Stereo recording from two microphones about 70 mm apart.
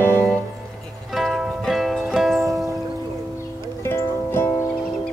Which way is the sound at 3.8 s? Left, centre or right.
Left.